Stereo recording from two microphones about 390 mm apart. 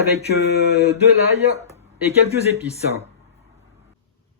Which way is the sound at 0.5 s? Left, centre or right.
Left.